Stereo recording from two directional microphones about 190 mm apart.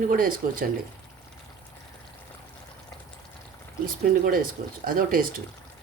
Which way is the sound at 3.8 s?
50° right (ahead or behind).